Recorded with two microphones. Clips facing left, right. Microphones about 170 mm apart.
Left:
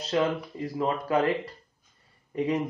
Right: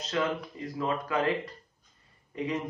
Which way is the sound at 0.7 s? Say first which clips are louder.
Left 4 dB; 30° left (ahead or behind).